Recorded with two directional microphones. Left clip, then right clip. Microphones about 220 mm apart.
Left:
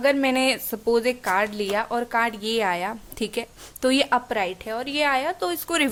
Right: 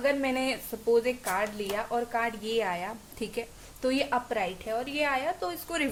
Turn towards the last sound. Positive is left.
turn(degrees=45)  # may be behind; listen again after turning